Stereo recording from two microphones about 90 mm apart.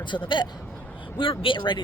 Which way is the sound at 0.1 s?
60° left (ahead or behind).